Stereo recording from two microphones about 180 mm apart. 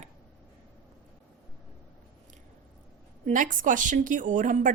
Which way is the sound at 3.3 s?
45° right (ahead or behind).